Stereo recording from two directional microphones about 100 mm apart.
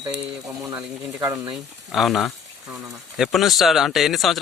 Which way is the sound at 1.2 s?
35° right (ahead or behind).